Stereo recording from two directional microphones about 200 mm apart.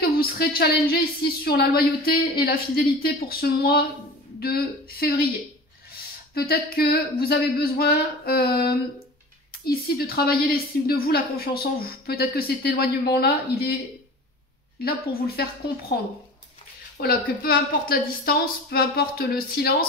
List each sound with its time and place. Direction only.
0.0 s a woman's voice: 50° left (ahead or behind)
6.3 s a woman's voice: 50° left (ahead or behind)
14.8 s a woman's voice: 50° left (ahead or behind)
17.0 s a woman's voice: 50° left (ahead or behind)